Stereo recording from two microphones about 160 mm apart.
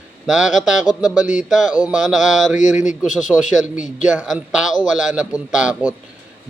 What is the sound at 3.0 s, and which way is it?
A man's voice, centre (ahead or behind).